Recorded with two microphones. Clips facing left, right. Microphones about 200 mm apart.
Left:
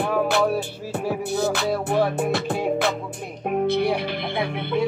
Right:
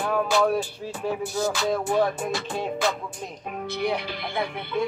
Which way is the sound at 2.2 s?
60° left (ahead or behind).